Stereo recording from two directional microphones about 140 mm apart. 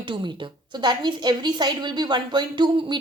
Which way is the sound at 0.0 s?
35° right (ahead or behind).